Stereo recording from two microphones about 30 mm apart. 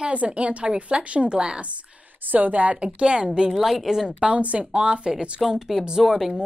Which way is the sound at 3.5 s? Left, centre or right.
Centre.